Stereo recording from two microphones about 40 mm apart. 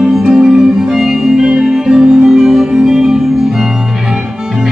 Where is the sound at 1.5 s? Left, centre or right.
Centre.